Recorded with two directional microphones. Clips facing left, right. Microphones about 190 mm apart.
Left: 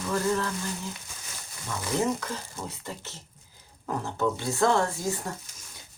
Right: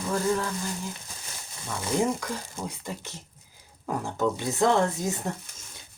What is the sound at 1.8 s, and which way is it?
Speech, 15° right (ahead or behind).